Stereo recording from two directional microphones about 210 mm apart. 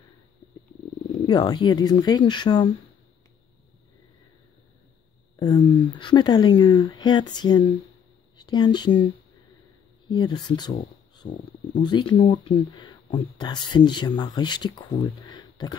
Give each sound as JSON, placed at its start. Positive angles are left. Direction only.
{"t": 1.2, "sound": "speech", "side_deg": 20}
{"t": 5.4, "sound": "speech", "side_deg": 20}
{"t": 10.0, "sound": "speech", "side_deg": 20}